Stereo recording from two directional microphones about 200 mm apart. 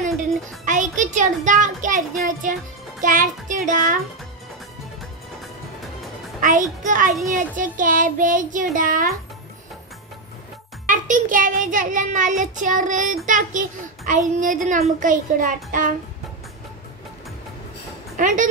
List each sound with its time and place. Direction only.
0.7 s a child's voice: 40° right (ahead or behind)
2.4 s child singing: 40° right (ahead or behind)
6.4 s child singing: 40° right (ahead or behind)
10.9 s child singing: 40° right (ahead or behind)
18.1 s a woman's voice: 40° right (ahead or behind)